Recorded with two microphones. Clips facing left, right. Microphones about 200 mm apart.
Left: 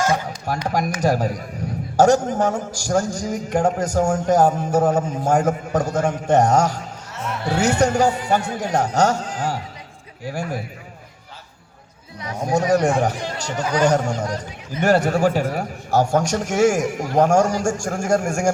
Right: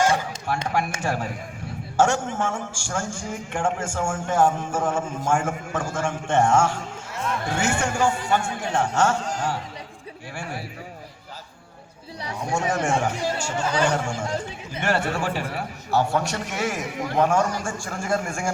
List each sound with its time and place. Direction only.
0.5 s a man's voice: 40° left (ahead or behind)
10.3 s a man's voice: 40° left (ahead or behind)
12.4 s a man's voice: 40° left (ahead or behind)